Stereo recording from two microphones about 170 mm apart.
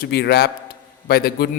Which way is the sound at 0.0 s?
70° left (ahead or behind).